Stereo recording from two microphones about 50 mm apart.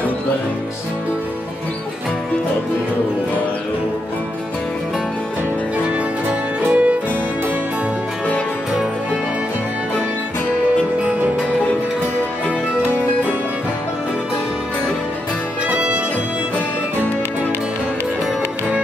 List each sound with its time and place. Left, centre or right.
6.7 s music: right
15.7 s music: right